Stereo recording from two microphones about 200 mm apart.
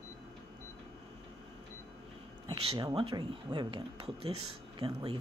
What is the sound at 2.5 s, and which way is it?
Speech, 25° right (ahead or behind).